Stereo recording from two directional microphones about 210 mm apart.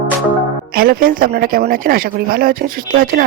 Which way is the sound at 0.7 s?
45° right (ahead or behind).